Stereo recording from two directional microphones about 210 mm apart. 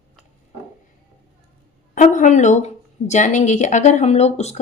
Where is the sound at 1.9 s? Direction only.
35° left (ahead or behind).